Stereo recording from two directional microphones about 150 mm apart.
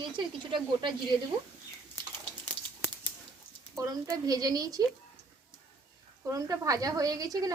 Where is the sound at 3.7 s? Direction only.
25° right (ahead or behind).